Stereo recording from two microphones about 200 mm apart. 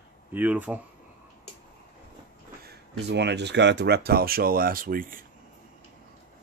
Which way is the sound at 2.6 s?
55° right (ahead or behind).